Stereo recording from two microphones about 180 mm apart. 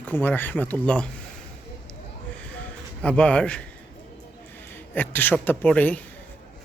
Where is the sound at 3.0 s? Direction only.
5° left (ahead or behind).